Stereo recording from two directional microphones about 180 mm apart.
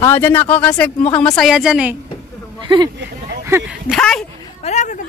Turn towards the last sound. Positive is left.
turn(degrees=40)  # may be behind; listen again after turning